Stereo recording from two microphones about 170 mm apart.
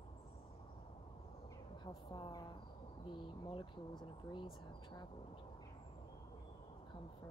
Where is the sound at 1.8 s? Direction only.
25° left (ahead or behind).